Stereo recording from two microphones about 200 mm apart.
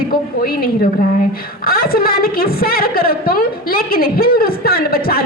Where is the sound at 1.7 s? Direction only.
50° left (ahead or behind).